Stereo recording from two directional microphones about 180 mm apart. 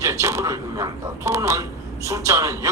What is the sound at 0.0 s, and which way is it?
A man's voice, 15° right (ahead or behind).